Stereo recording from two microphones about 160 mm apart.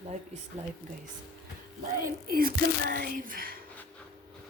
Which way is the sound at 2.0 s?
65° right (ahead or behind).